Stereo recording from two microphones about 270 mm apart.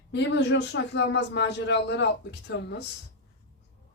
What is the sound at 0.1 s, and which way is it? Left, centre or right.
Speech, left.